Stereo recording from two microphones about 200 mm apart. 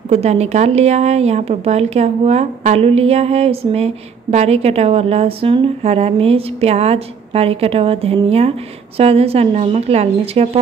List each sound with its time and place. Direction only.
0.1 s a woman's voice: 30° right (ahead or behind)